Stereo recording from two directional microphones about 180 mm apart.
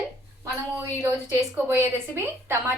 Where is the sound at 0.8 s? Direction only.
15° right (ahead or behind).